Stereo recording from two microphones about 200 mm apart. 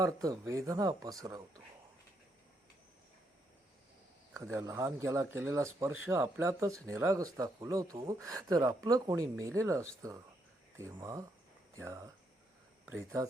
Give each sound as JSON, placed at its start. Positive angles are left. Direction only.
{"t": 0.0, "sound": "speech", "side_deg": -15}
{"t": 4.4, "sound": "speech", "side_deg": -15}